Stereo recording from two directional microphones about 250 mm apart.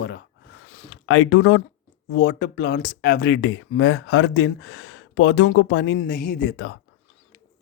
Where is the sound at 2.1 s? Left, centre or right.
Left.